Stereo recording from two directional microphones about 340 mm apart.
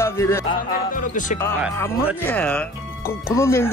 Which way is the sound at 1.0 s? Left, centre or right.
Left.